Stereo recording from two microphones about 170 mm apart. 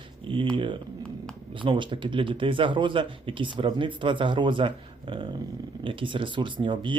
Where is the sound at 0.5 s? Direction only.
30° right (ahead or behind).